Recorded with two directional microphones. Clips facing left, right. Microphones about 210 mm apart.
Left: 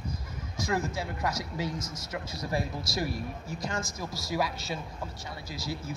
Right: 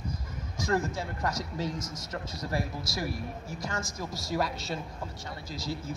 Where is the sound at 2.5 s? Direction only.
20° left (ahead or behind).